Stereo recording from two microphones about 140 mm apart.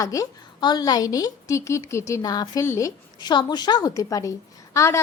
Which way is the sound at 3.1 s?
30° left (ahead or behind).